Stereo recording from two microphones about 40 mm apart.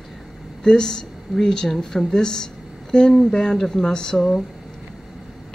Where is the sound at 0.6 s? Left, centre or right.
Centre.